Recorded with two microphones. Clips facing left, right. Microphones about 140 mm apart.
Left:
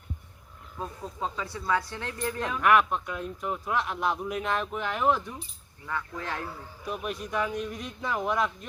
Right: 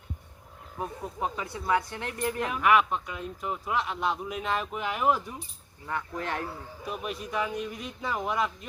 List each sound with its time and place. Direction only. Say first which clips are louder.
0.8 s speech: right 2 dB; 20° right (ahead or behind)
2.4 s a man's voice: left 1 dB; 5° right (ahead or behind)
5.8 s speech: right 1 dB; 25° right (ahead or behind)
6.8 s a man's voice: left 1 dB; centre (ahead or behind)